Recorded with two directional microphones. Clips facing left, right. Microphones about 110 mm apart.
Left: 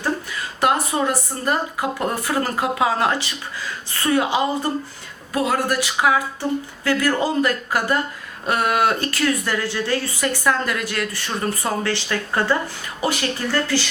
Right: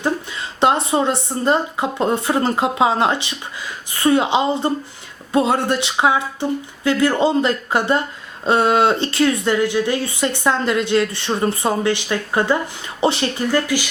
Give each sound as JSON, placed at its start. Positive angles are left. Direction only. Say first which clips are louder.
{"t": 0.6, "sound": "speech", "louder": "right 3 dB", "side_deg": -25}
{"t": 13.5, "sound": "speech", "louder": "right 2 dB", "side_deg": -15}